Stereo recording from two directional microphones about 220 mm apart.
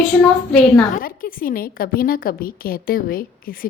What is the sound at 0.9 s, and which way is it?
A woman's voice, 40° left (ahead or behind).